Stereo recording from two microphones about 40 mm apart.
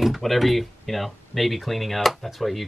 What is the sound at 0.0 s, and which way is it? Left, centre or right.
Speech, centre.